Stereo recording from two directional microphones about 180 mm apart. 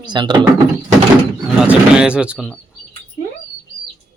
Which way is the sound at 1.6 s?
5° right (ahead or behind).